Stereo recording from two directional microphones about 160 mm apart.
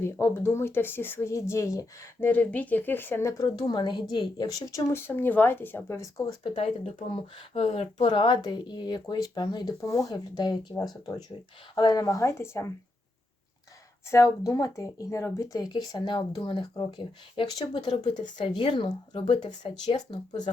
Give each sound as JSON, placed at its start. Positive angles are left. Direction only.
{"t": 0.0, "sound": "speech", "side_deg": 15}
{"t": 6.4, "sound": "speech", "side_deg": 35}
{"t": 14.1, "sound": "speech", "side_deg": 20}